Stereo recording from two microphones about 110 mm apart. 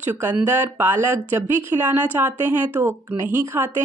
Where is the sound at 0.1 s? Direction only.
15° right (ahead or behind).